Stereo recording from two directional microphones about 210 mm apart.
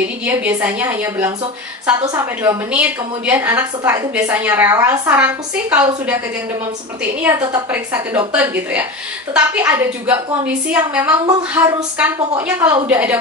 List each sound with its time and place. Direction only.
0.2 s a woman's voice: 10° right (ahead or behind)
2.7 s a woman's voice: 10° right (ahead or behind)